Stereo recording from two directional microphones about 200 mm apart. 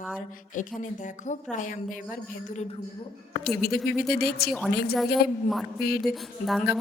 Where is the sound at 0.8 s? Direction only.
40° left (ahead or behind).